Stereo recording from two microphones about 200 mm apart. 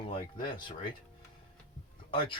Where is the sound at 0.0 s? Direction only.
25° left (ahead or behind).